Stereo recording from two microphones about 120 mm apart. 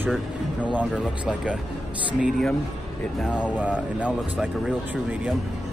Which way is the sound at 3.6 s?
10° right (ahead or behind).